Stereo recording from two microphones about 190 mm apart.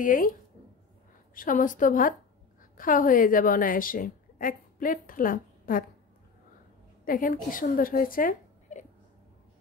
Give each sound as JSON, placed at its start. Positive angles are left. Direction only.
{"t": 0.0, "sound": "a woman's voice", "side_deg": 45}
{"t": 7.1, "sound": "a woman's voice", "side_deg": 45}